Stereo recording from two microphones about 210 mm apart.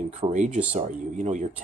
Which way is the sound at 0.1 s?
35° right (ahead or behind).